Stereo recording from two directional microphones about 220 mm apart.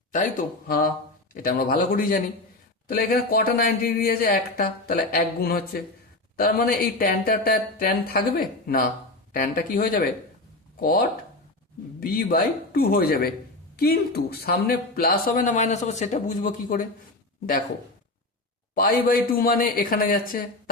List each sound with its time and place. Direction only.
0.1 s speech: 40° left (ahead or behind)
18.7 s speech: 40° left (ahead or behind)